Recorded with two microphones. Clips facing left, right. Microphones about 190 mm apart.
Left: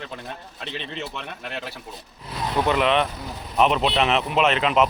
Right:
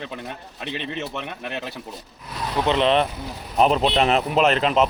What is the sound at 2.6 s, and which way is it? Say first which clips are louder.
Speech: right 3 dB; 30° right (ahead or behind).